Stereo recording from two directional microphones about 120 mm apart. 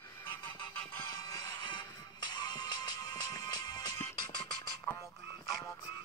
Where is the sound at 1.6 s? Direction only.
40° left (ahead or behind).